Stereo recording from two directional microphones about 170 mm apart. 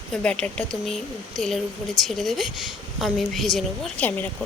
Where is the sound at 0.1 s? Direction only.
5° left (ahead or behind).